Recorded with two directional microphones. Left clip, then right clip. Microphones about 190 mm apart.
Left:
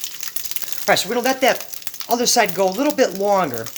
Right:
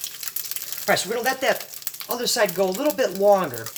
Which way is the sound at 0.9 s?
50° left (ahead or behind).